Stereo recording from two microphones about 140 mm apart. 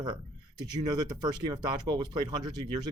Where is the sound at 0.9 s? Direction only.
30° right (ahead or behind).